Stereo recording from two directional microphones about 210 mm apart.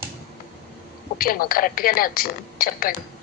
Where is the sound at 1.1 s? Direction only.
45° left (ahead or behind).